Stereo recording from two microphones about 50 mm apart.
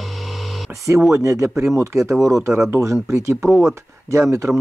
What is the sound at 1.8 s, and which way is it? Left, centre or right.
Speech, right.